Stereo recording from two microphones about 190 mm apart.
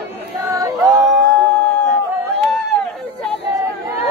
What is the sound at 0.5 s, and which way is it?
A capella, 20° right (ahead or behind).